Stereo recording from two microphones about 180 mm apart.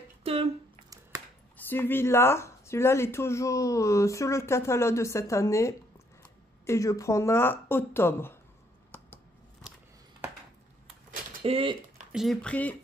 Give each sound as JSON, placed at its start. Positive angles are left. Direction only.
{"t": 0.2, "sound": "a sound", "side_deg": -35}
{"t": 1.7, "sound": "speech", "side_deg": 10}
{"t": 11.4, "sound": "speech", "side_deg": -30}
{"t": 12.1, "sound": "speech", "side_deg": 0}